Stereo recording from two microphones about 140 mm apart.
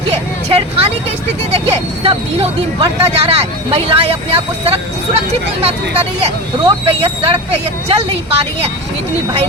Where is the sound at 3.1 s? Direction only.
45° right (ahead or behind).